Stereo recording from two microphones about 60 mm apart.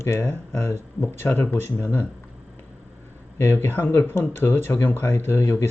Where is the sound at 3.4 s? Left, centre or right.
Left.